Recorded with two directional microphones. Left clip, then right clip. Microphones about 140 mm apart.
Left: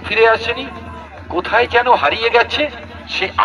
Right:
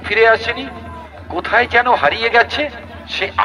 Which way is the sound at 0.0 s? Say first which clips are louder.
Right 1 dB; 50° right (ahead or behind).